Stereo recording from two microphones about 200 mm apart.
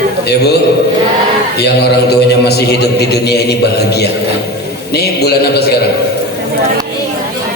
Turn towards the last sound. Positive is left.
turn(degrees=50)  # may be behind; listen again after turning